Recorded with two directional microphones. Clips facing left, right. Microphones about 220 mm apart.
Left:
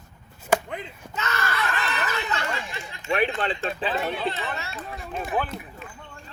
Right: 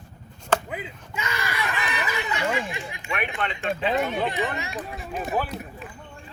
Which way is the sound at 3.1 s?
30° left (ahead or behind).